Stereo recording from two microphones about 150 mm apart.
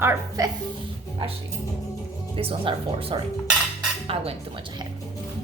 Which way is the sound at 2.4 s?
40° right (ahead or behind).